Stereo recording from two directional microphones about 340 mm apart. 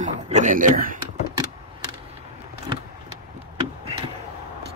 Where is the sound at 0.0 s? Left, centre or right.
Right.